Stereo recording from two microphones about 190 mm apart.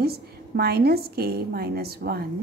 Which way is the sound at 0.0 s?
55° right (ahead or behind).